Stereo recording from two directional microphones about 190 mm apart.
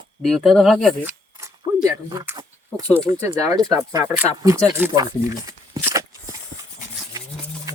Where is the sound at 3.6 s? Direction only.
20° right (ahead or behind).